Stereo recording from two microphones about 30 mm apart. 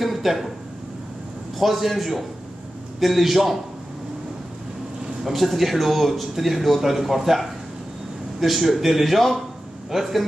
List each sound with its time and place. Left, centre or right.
0.0 s a sound: centre
1.6 s speech: centre
5.2 s a man's voice: centre